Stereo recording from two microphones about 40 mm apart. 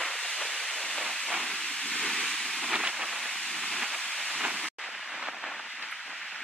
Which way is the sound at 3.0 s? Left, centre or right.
Centre.